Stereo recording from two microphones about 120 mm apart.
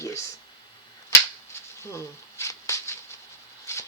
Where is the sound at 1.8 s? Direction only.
25° left (ahead or behind).